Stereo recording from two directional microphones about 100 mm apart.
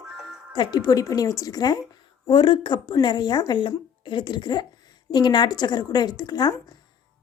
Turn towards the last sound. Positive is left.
turn(degrees=40)  # may be behind; listen again after turning